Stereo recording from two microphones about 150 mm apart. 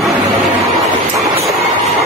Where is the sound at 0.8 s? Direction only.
45° right (ahead or behind).